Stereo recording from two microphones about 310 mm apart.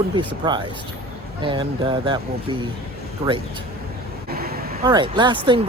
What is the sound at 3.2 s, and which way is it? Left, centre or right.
Speech, centre.